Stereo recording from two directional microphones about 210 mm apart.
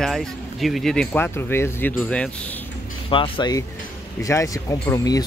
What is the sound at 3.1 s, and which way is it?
Speech, 25° left (ahead or behind).